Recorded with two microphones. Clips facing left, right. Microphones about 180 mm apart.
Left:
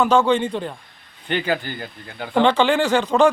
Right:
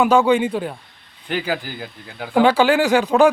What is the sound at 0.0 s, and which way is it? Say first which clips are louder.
A man's voice: right 2 dB; 10° right (ahead or behind).